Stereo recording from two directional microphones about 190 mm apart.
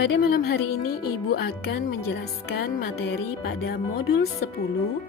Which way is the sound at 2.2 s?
55° left (ahead or behind).